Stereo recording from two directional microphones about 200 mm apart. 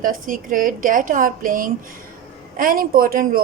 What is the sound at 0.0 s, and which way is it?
Speech, 45° right (ahead or behind).